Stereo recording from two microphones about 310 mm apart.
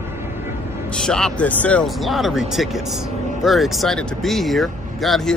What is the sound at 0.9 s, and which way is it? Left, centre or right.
Speech, centre.